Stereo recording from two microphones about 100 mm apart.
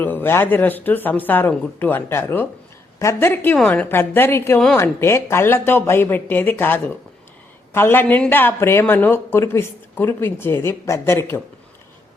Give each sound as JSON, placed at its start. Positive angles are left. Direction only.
{"t": 0.0, "sound": "speech", "side_deg": 20}
{"t": 3.6, "sound": "speech", "side_deg": 5}
{"t": 3.8, "sound": "speech", "side_deg": 20}
{"t": 8.0, "sound": "speech", "side_deg": 10}
{"t": 8.3, "sound": "speech", "side_deg": 20}